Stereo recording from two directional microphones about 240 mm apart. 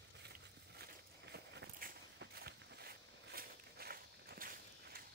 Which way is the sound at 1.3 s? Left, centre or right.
Right.